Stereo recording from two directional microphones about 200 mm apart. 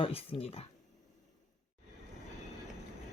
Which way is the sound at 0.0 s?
30° left (ahead or behind).